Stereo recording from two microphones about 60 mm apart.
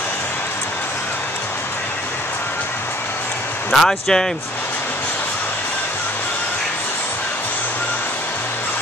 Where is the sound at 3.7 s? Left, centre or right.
Centre.